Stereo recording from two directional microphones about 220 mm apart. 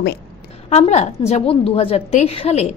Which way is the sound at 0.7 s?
30° left (ahead or behind).